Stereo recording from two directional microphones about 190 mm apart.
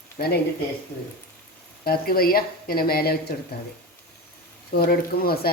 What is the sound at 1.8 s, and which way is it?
Speech, 50° left (ahead or behind).